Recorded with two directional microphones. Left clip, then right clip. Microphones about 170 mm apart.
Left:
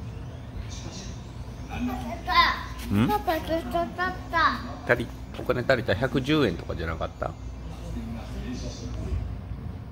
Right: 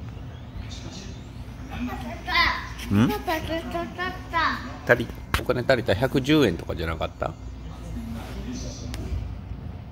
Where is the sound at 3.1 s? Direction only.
10° left (ahead or behind).